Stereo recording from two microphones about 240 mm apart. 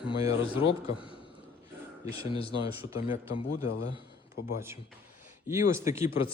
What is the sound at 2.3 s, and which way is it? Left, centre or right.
Speech, left.